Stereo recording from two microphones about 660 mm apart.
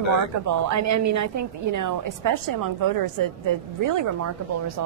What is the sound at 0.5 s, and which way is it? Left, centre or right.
A woman's voice, right.